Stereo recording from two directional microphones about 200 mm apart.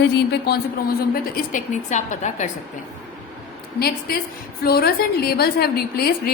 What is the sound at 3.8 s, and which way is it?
A woman's voice, 50° left (ahead or behind).